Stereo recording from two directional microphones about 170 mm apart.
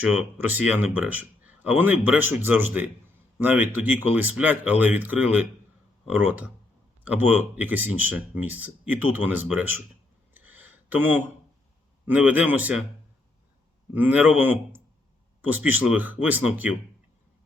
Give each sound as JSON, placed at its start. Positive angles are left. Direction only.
{"t": 0.3, "sound": "speech", "side_deg": -10}
{"t": 7.0, "sound": "speech", "side_deg": -10}
{"t": 10.3, "sound": "a sound", "side_deg": -10}
{"t": 12.0, "sound": "speech", "side_deg": -10}
{"t": 13.9, "sound": "speech", "side_deg": -10}